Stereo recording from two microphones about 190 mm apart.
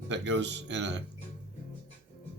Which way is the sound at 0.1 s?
70° right (ahead or behind).